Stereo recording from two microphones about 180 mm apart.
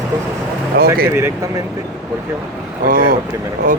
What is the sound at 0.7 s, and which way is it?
Speech, 60° right (ahead or behind).